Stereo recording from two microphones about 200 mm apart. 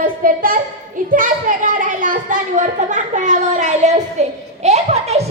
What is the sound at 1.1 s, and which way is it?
A child's voice, 45° right (ahead or behind).